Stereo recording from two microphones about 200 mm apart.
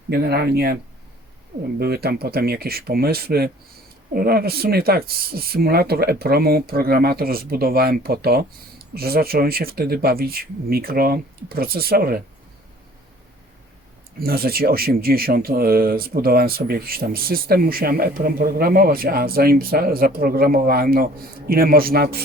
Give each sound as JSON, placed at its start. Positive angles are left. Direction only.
{"t": 0.1, "sound": "speech", "side_deg": -50}
{"t": 1.8, "sound": "speech", "side_deg": -50}
{"t": 14.2, "sound": "speech", "side_deg": -50}